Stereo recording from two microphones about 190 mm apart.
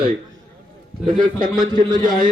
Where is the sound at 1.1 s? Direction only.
45° right (ahead or behind).